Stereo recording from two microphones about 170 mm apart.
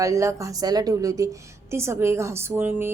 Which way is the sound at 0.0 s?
20° right (ahead or behind).